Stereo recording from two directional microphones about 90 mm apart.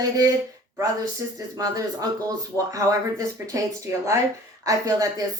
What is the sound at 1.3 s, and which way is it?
A woman's voice, 40° right (ahead or behind).